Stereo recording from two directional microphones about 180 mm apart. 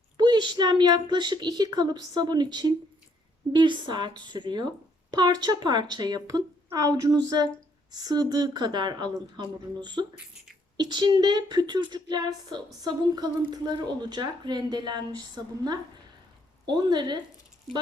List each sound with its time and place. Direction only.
0.2 s speech: 25° right (ahead or behind)
16.6 s speech: 25° right (ahead or behind)